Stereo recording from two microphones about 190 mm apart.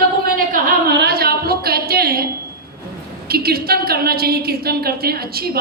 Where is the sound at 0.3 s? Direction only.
55° right (ahead or behind).